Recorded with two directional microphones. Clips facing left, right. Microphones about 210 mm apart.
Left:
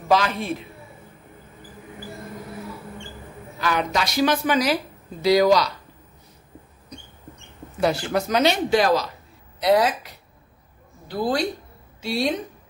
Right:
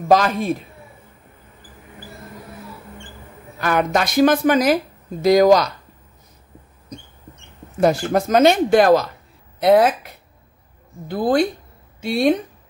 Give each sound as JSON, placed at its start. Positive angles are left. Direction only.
{"t": 0.1, "sound": "speech", "side_deg": -45}
{"t": 3.6, "sound": "speech", "side_deg": -50}
{"t": 7.8, "sound": "speech", "side_deg": -45}